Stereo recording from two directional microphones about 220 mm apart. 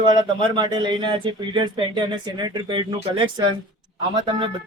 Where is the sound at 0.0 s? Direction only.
20° right (ahead or behind).